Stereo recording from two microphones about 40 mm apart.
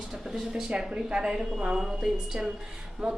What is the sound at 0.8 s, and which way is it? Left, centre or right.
A woman's voice, centre.